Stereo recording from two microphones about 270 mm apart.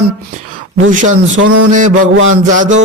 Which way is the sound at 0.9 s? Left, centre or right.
Right.